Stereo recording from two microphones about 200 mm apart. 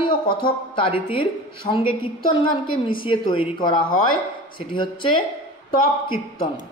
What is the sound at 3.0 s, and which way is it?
Speech, 25° left (ahead or behind).